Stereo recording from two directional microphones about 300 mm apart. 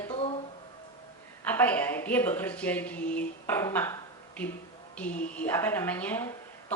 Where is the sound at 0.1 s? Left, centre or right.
Centre.